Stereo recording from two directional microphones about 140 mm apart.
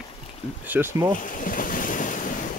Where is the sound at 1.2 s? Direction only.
75° left (ahead or behind).